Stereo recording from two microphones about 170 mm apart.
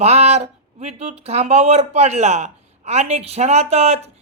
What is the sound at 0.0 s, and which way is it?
Speech, 40° right (ahead or behind).